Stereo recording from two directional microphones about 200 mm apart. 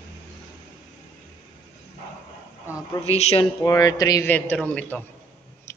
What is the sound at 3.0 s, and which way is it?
Speech, 30° left (ahead or behind).